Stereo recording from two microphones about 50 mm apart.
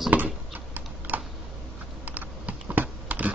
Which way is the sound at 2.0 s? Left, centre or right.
Right.